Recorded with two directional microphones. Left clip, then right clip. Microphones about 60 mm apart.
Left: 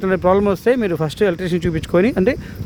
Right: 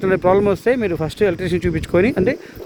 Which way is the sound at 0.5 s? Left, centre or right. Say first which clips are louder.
Left 1 dB; left.